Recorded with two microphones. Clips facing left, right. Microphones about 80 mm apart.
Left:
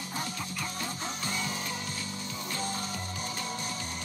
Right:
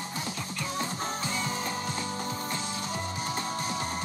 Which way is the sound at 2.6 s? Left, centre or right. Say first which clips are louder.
Even; left.